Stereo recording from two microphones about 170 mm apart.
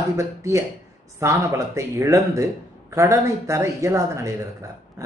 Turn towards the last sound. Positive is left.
turn(degrees=-15)  # may be behind; listen again after turning